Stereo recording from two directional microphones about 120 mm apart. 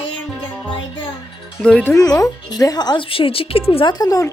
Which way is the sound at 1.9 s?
30° left (ahead or behind).